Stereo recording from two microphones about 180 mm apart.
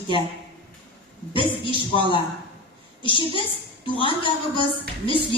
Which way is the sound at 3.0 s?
30° left (ahead or behind).